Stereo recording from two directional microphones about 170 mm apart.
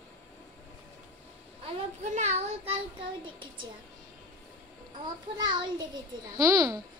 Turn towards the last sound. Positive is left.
turn(degrees=-20)  # may be behind; listen again after turning